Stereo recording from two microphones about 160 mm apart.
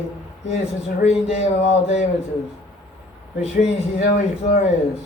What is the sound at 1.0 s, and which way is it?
A man's voice, 40° left (ahead or behind).